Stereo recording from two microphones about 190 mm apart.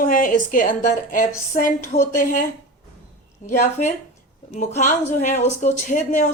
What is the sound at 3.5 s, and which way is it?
A woman's voice, 45° left (ahead or behind).